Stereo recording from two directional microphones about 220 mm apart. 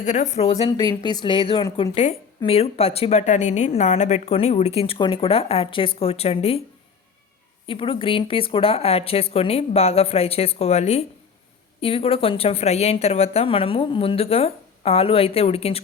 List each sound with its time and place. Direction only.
0.0 s a woman's voice: 35° left (ahead or behind)
7.7 s a woman's voice: 25° left (ahead or behind)